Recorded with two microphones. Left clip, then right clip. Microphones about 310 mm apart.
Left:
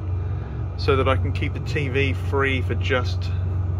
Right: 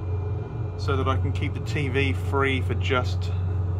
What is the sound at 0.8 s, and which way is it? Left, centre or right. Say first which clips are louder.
Speech: left 6 dB; centre.